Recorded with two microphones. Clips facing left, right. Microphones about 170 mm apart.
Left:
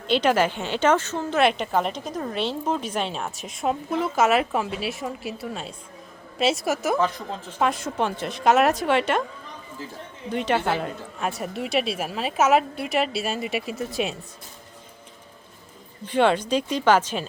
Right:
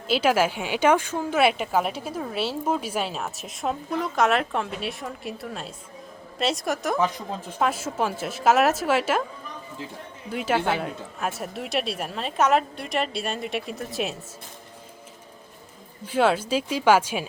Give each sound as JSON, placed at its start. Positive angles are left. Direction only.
{"t": 0.1, "sound": "a woman's voice", "side_deg": -5}
{"t": 10.2, "sound": "a woman's voice", "side_deg": -5}
{"t": 16.0, "sound": "speech", "side_deg": -5}